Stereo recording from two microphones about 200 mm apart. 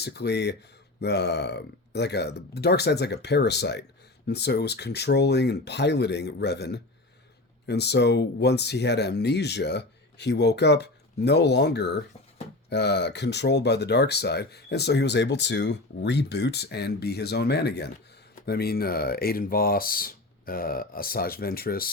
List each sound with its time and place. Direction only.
0.0 s speech: 55° left (ahead or behind)